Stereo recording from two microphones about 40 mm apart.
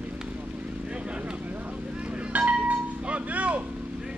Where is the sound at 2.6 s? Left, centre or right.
Right.